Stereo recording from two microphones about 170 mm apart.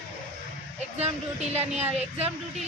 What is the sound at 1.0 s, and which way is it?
Speech, 40° right (ahead or behind).